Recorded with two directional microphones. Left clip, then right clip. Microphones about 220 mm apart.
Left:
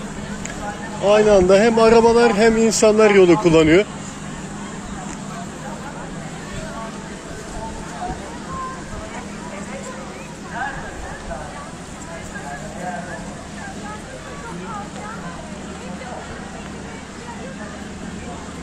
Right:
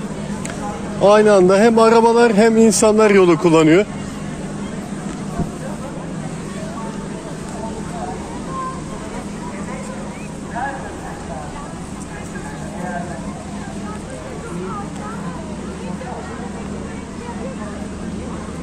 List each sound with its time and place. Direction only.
1.0 s a man's voice: 30° right (ahead or behind)